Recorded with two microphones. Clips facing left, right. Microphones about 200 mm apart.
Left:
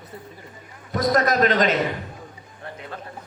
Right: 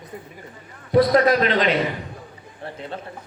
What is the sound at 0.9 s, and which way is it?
Speech, 45° left (ahead or behind).